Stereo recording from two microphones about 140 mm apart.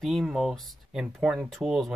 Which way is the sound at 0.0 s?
Centre (ahead or behind).